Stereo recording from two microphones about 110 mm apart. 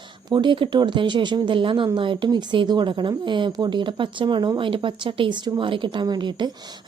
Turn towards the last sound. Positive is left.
turn(degrees=-45)  # may be behind; listen again after turning